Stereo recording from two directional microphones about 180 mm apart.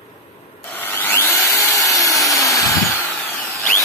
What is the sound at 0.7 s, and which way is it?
Tools, 10° left (ahead or behind).